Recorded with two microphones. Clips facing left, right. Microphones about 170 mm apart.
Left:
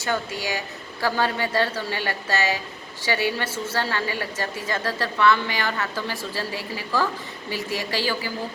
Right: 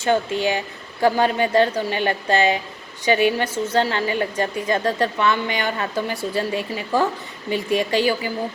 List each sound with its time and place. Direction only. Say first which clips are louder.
0.1 s a woman's voice: right 7 dB; 25° right (ahead or behind)